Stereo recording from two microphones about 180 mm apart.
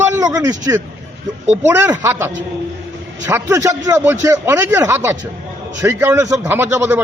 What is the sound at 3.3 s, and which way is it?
A man's voice, 15° right (ahead or behind).